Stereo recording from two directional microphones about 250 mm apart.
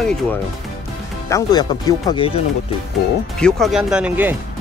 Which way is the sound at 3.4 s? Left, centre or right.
Centre.